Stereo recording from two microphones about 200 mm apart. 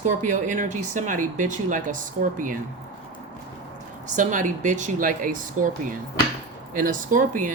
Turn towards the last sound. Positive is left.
turn(degrees=-40)  # may be behind; listen again after turning